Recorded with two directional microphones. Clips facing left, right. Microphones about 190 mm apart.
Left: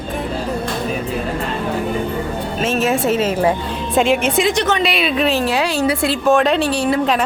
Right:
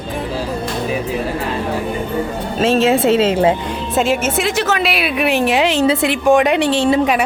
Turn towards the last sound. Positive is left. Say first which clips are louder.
# right 3 dB
turn(degrees=-25)  # may be behind; listen again after turning